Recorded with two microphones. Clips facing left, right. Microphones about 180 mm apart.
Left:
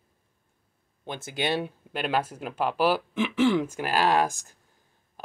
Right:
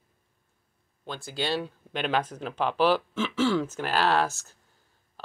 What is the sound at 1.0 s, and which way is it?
Speech, 20° left (ahead or behind).